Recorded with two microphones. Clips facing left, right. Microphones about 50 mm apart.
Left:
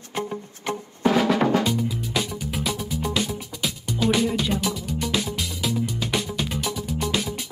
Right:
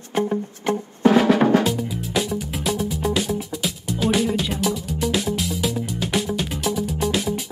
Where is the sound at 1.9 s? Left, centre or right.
Centre.